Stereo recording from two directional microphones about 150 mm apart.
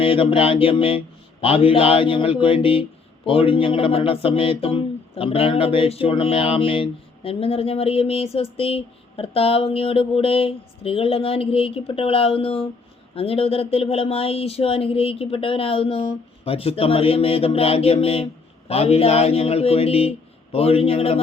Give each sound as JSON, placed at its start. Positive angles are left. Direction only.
{"t": 0.0, "sound": "speech", "side_deg": 35}